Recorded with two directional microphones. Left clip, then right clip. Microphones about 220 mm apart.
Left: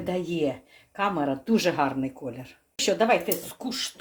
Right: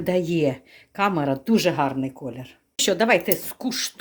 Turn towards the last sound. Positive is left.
turn(degrees=-50)  # may be behind; listen again after turning